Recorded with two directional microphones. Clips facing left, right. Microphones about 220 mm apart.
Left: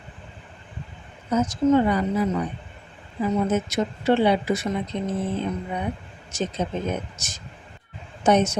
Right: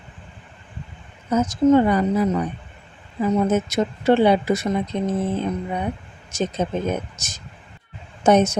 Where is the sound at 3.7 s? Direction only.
45° right (ahead or behind).